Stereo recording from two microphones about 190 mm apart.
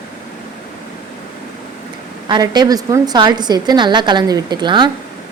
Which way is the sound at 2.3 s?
20° right (ahead or behind).